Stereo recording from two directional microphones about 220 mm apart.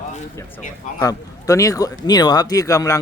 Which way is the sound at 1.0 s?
15° left (ahead or behind).